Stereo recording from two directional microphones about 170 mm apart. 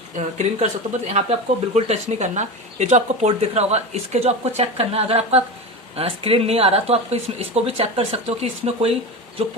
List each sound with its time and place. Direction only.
0.2 s speech: 45° right (ahead or behind)